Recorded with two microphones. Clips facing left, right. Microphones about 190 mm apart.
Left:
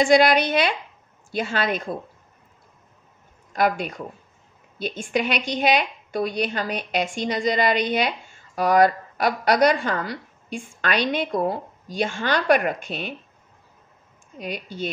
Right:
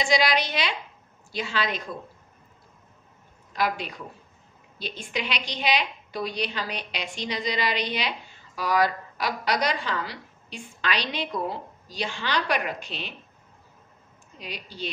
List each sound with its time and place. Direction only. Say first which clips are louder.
0.0 s a woman's voice: left 7 dB; 55° left (ahead or behind)
3.5 s a woman's voice: left 5 dB; 50° left (ahead or behind)
14.4 s a woman's voice: left 6 dB; 50° left (ahead or behind)